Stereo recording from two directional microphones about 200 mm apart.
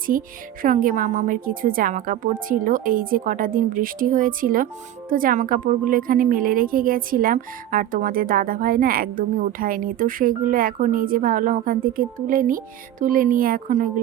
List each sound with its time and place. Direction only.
0.1 s a woman's voice: 45° right (ahead or behind)